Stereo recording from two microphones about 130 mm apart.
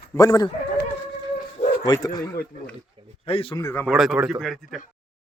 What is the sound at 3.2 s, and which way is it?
Speech, 45° left (ahead or behind).